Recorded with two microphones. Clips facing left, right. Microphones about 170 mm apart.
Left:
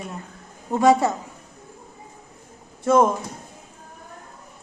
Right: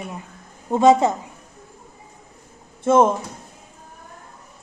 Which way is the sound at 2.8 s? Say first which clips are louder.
Right 2 dB; 25° right (ahead or behind).